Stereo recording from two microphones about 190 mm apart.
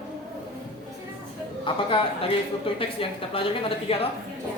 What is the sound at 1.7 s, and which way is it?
A woman's voice, 25° left (ahead or behind).